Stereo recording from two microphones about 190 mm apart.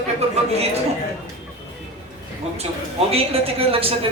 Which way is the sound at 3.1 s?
30° right (ahead or behind).